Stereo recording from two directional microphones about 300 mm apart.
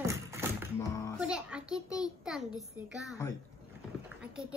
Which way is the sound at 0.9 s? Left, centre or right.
Centre.